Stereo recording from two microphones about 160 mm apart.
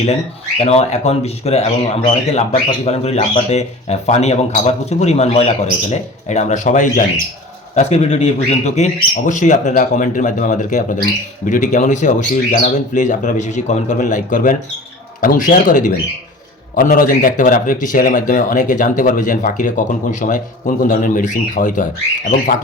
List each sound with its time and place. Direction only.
0.6 s speech: 40° left (ahead or behind)